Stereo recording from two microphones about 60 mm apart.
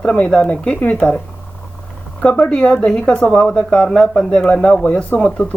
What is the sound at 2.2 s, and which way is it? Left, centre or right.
Speech, left.